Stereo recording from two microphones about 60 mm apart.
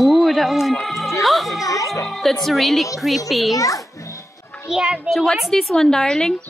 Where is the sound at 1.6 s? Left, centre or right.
Left.